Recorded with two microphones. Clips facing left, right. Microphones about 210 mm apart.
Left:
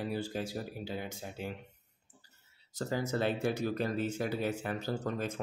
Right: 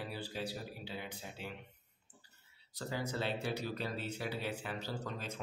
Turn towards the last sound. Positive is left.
turn(degrees=50)  # may be behind; listen again after turning